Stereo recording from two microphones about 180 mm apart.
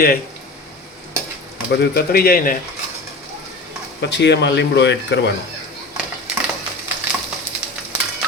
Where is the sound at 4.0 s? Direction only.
70° left (ahead or behind).